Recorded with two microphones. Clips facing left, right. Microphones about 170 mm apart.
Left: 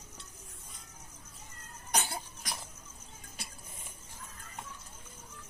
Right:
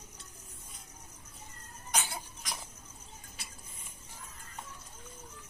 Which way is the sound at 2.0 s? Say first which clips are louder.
Left 2 dB; 45° left (ahead or behind).